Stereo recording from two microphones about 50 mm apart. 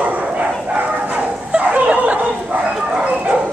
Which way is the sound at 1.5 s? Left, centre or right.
Right.